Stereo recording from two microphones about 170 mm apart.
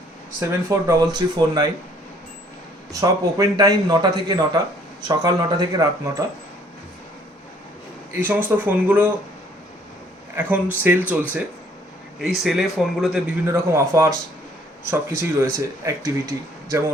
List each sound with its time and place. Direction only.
0.3 s a man's voice: 15° right (ahead or behind)
2.9 s a man's voice: 20° right (ahead or behind)
8.2 s speech: 10° right (ahead or behind)
10.3 s speech: 10° right (ahead or behind)
13.5 s speech: 15° right (ahead or behind)